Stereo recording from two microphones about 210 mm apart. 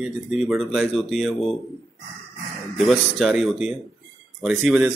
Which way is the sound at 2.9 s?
Centre (ahead or behind).